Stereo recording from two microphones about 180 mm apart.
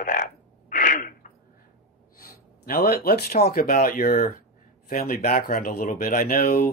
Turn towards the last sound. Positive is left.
turn(degrees=55)  # may be behind; listen again after turning